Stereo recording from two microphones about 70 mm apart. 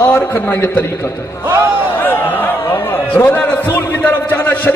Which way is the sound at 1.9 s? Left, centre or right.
Left.